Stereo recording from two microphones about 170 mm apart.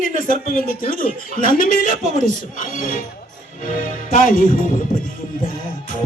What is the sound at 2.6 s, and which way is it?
A man's voice, 50° left (ahead or behind).